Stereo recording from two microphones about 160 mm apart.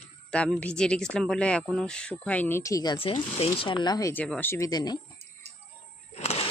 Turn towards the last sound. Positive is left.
turn(degrees=40)  # may be behind; listen again after turning